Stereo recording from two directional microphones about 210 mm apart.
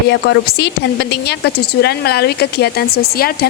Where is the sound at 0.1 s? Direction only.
55° left (ahead or behind).